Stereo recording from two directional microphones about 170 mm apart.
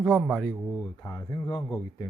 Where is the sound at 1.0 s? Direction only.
20° left (ahead or behind).